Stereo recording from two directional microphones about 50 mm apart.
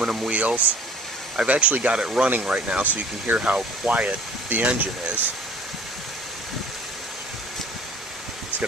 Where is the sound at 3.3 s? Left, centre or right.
Right.